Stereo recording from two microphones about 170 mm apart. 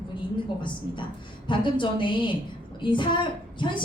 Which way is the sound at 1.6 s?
30° left (ahead or behind).